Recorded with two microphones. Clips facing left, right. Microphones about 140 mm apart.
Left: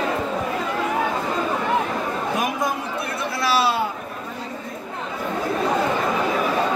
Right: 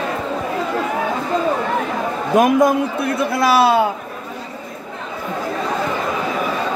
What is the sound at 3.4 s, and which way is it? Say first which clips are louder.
Speech: right 6 dB; 50° right (ahead or behind).